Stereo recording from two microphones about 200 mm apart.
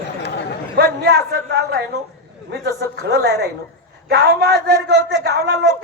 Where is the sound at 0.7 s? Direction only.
55° right (ahead or behind).